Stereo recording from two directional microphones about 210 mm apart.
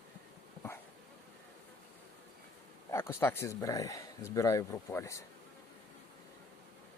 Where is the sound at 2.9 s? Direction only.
10° left (ahead or behind).